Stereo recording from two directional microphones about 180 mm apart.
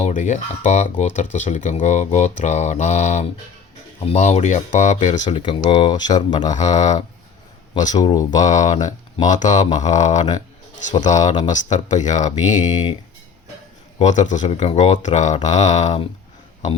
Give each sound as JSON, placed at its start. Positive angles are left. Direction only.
{"t": 0.0, "sound": "speech", "side_deg": 40}
{"t": 5.3, "sound": "speech", "side_deg": 25}
{"t": 6.7, "sound": "speech", "side_deg": 40}
{"t": 7.9, "sound": "speech", "side_deg": 20}
{"t": 8.4, "sound": "speech", "side_deg": 40}
{"t": 10.3, "sound": "a sound", "side_deg": 40}
{"t": 11.0, "sound": "speech", "side_deg": 40}
{"t": 14.0, "sound": "speech", "side_deg": 40}